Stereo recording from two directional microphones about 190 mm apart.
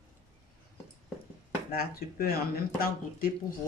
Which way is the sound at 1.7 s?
50° left (ahead or behind).